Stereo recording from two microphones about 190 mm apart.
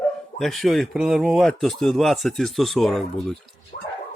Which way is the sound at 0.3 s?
Centre (ahead or behind).